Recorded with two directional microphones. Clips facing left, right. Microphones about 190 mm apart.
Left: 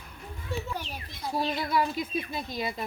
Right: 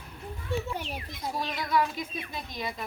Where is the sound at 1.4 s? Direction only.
30° left (ahead or behind).